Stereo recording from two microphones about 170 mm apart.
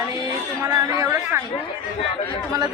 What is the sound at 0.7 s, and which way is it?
Speech, 20° right (ahead or behind).